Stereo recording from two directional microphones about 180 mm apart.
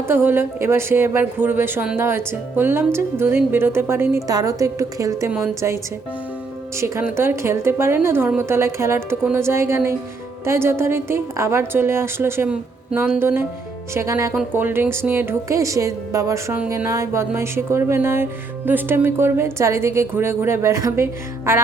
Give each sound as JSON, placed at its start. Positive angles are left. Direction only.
{"t": 0.1, "sound": "a woman's voice", "side_deg": -10}